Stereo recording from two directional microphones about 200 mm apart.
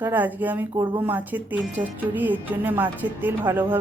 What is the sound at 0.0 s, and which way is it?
Speech, 10° right (ahead or behind).